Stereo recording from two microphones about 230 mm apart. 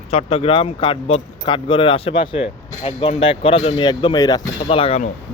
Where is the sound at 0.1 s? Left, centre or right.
Left.